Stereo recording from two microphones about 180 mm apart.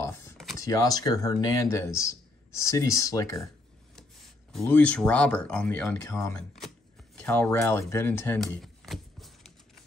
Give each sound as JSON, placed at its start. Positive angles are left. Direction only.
{"t": 0.6, "sound": "speech", "side_deg": 20}
{"t": 4.5, "sound": "speech", "side_deg": 5}
{"t": 8.4, "sound": "a sound", "side_deg": 0}